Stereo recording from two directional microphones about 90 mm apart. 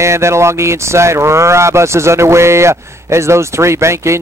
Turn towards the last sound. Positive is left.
turn(degrees=-30)  # may be behind; listen again after turning